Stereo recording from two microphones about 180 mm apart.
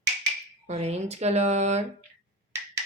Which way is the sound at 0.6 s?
35° right (ahead or behind).